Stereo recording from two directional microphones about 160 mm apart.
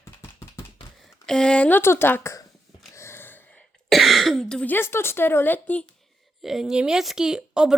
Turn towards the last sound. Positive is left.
turn(degrees=-5)  # may be behind; listen again after turning